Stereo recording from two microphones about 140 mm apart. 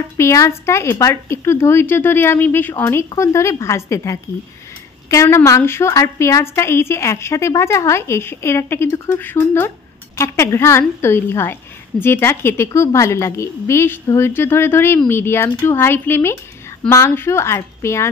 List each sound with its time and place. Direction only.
0.2 s a woman's voice: 20° left (ahead or behind)